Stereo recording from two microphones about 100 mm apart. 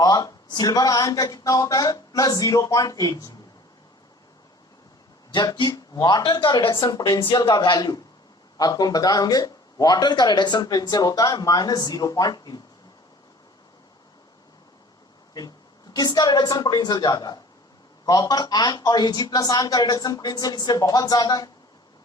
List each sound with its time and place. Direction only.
0.0 s speech: 40° left (ahead or behind)
5.5 s speech: 45° left (ahead or behind)
15.4 s speech: 40° left (ahead or behind)